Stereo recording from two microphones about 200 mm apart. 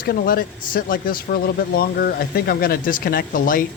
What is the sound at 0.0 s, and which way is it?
A man's voice, 45° left (ahead or behind).